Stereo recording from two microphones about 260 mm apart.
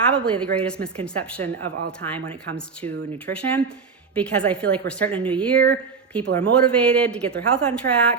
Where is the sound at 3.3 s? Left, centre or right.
Right.